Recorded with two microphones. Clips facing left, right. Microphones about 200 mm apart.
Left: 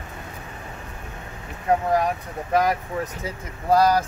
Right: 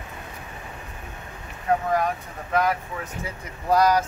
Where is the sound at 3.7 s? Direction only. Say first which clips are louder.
Left 1 dB; 30° left (ahead or behind).